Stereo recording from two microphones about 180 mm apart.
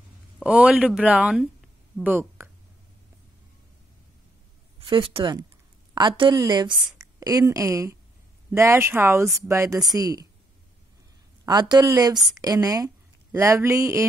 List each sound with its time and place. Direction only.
0.4 s speech: 5° right (ahead or behind)
4.7 s a woman's voice: 30° right (ahead or behind)
11.4 s a woman's voice: 20° right (ahead or behind)